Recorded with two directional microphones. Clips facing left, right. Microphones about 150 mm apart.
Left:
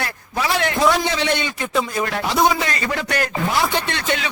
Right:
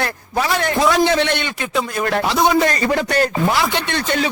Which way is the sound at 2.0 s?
50° right (ahead or behind).